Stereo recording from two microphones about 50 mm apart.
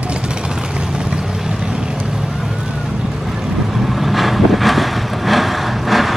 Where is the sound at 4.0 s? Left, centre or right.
Centre.